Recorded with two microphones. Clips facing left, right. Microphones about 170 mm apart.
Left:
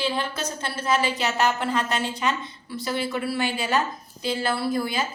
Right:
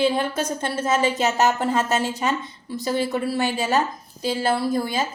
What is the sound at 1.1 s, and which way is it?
A woman's voice, 45° right (ahead or behind).